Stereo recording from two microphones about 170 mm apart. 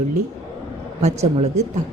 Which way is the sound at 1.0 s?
40° right (ahead or behind).